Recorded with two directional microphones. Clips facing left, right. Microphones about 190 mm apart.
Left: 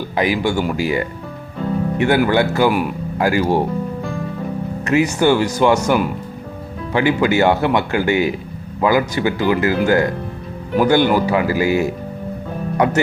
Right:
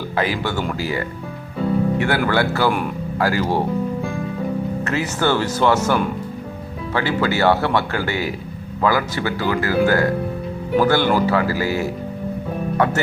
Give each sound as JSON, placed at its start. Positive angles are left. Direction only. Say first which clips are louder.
{"t": 0.2, "sound": "speech", "louder": "left 4 dB", "side_deg": 15}
{"t": 4.9, "sound": "speech", "louder": "left 7 dB", "side_deg": 15}